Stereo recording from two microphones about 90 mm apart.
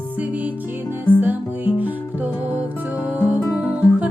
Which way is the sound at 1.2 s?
20° right (ahead or behind).